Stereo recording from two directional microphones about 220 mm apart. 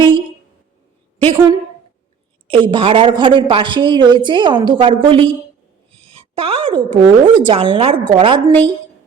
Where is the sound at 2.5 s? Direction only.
25° right (ahead or behind).